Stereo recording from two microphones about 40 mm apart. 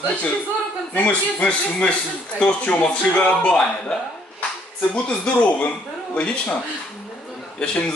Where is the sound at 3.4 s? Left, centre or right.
Centre.